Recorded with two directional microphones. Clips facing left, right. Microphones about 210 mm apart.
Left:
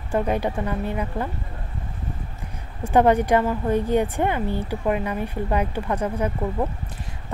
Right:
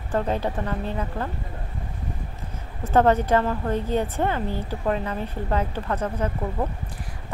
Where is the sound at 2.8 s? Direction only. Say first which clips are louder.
Left 2 dB; 15° left (ahead or behind).